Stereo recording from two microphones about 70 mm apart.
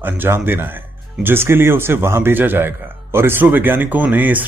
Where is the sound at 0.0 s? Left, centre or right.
Right.